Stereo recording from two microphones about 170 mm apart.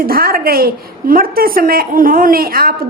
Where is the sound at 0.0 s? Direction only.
60° right (ahead or behind).